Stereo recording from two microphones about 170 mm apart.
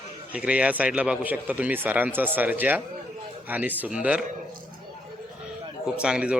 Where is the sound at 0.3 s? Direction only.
5° right (ahead or behind).